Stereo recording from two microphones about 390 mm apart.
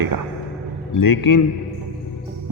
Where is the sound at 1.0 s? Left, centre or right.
Left.